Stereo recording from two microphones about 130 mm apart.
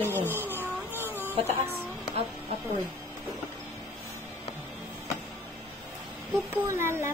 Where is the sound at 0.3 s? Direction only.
15° right (ahead or behind).